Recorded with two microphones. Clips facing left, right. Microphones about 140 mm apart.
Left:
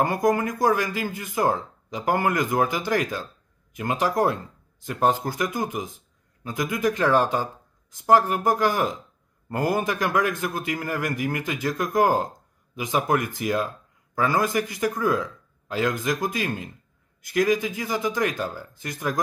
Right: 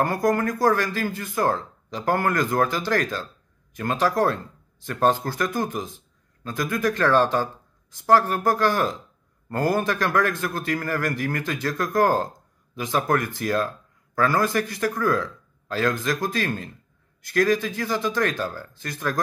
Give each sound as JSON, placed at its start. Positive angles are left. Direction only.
{"t": 0.0, "sound": "speech", "side_deg": 15}